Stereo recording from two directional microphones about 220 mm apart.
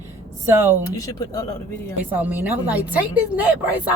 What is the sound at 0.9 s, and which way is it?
Speech, 15° left (ahead or behind).